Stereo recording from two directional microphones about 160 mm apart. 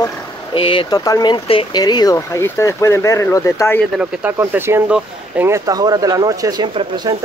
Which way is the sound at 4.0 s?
10° right (ahead or behind).